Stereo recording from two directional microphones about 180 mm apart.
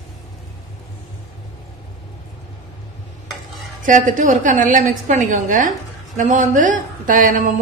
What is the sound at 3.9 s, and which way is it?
A woman's voice, 45° right (ahead or behind).